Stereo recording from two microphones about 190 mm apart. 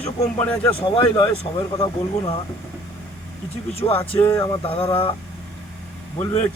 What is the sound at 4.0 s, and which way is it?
Speech, 15° left (ahead or behind).